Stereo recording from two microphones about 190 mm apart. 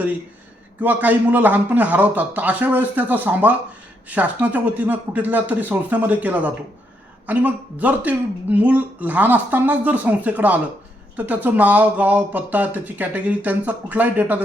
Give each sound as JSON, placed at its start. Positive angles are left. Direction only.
{"t": 0.8, "sound": "speech", "side_deg": -10}